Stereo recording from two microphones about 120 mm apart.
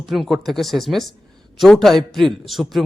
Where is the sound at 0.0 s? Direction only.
Centre (ahead or behind).